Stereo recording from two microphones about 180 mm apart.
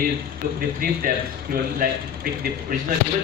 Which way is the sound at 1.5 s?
55° right (ahead or behind).